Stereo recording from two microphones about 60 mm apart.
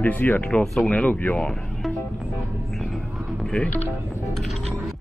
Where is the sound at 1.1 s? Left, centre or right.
Left.